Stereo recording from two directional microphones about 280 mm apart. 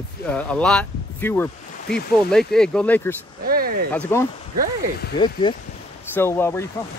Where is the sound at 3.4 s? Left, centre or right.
Right.